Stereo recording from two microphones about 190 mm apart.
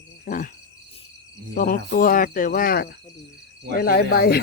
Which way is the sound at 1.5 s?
45° left (ahead or behind).